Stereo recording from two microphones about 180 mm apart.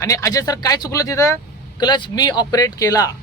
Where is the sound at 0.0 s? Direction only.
15° left (ahead or behind).